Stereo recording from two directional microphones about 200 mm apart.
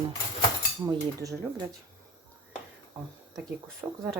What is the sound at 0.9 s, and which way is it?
Speech, 20° right (ahead or behind).